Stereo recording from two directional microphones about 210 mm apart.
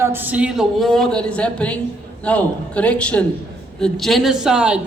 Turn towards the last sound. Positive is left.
turn(degrees=-5)  # may be behind; listen again after turning